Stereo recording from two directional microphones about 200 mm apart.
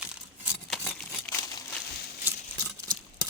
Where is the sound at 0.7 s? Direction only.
5° left (ahead or behind).